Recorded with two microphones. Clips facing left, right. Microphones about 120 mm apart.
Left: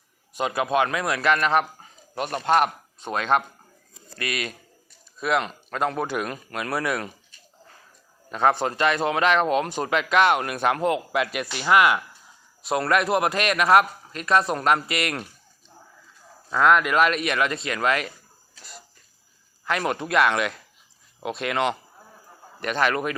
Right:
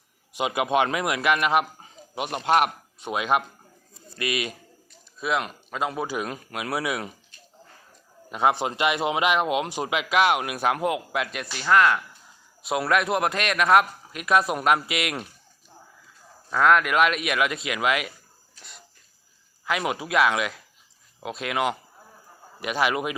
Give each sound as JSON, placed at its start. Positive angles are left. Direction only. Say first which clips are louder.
{"t": 0.3, "sound": "a man's voice", "louder": "even", "side_deg": -15}
{"t": 4.1, "sound": "speech", "louder": "right 2 dB", "side_deg": 45}
{"t": 5.2, "sound": "a man's voice", "louder": "left 2 dB", "side_deg": 0}
{"t": 8.3, "sound": "a man's voice", "louder": "left 1 dB", "side_deg": -10}
{"t": 12.6, "sound": "a man's voice", "louder": "left 1 dB", "side_deg": 0}
{"t": 16.5, "sound": "a man's voice", "louder": "left 1 dB", "side_deg": 0}
{"t": 19.6, "sound": "a man's voice", "louder": "left 1 dB", "side_deg": -5}